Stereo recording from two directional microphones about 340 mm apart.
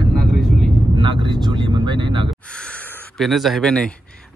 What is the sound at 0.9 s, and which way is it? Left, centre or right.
Speech, centre.